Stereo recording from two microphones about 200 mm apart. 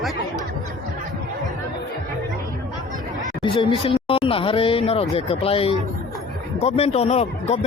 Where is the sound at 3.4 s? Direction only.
25° left (ahead or behind).